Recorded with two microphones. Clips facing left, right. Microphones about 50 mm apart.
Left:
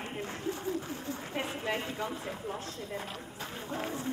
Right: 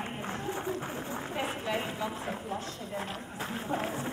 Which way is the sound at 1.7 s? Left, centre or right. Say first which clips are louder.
Right 2 dB; centre.